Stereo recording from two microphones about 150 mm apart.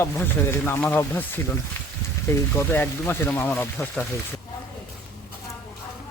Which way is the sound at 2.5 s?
15° left (ahead or behind).